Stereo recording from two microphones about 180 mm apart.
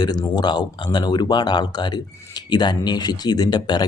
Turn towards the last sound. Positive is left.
turn(degrees=25)  # may be behind; listen again after turning